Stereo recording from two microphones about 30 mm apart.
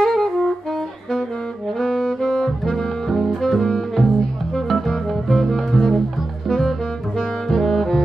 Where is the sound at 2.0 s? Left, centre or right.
Centre.